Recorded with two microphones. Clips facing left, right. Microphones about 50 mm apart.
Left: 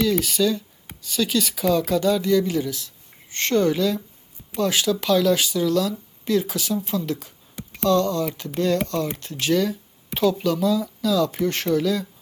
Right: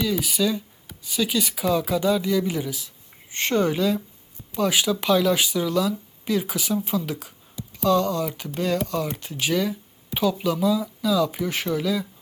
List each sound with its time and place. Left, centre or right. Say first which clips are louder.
0.0 s speech: left 3 dB; centre
7.5 s a sound: left 1 dB; left
7.9 s speech: left 1 dB; centre